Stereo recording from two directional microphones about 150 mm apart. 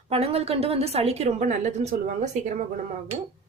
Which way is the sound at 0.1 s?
40° right (ahead or behind).